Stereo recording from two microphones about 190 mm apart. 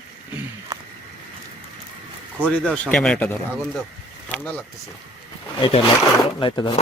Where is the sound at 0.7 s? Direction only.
15° right (ahead or behind).